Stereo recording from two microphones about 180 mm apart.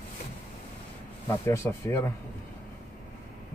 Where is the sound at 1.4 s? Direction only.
15° left (ahead or behind).